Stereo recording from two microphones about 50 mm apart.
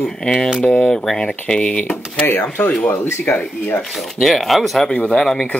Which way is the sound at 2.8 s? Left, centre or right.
Left.